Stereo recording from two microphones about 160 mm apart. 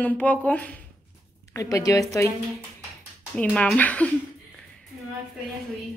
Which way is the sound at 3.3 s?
5° left (ahead or behind).